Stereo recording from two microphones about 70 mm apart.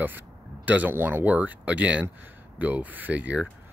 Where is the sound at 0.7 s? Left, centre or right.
Right.